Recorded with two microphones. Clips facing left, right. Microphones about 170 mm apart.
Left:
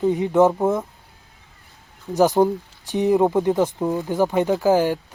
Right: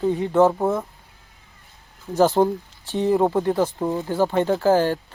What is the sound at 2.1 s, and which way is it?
Speech, 15° left (ahead or behind).